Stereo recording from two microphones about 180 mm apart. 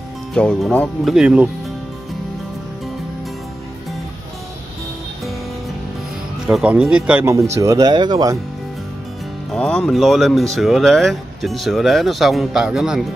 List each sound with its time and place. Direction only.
0.3 s speech: 5° left (ahead or behind)
6.4 s speech: 5° right (ahead or behind); by 8.4 s 20° right (ahead or behind)
9.5 s speech: 5° left (ahead or behind)